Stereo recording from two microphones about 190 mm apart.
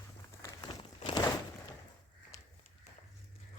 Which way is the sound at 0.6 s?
25° left (ahead or behind).